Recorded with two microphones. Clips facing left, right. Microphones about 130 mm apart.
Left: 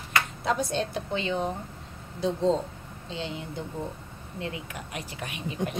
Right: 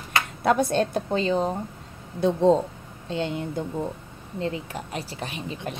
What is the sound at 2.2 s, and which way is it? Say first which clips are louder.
A woman's voice: right 6 dB; 55° right (ahead or behind).